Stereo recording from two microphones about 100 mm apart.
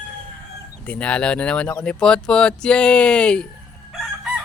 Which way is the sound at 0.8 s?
10° left (ahead or behind).